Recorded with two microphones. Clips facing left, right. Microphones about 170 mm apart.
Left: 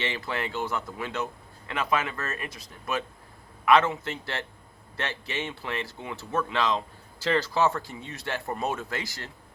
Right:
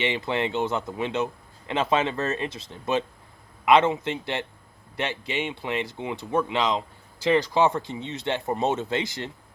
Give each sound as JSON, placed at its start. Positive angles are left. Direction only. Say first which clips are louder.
{"t": 0.0, "sound": "speech", "louder": "right 6 dB", "side_deg": -20}